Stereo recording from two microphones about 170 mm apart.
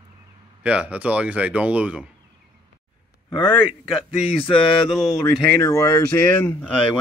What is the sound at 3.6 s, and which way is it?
Speech, 5° right (ahead or behind).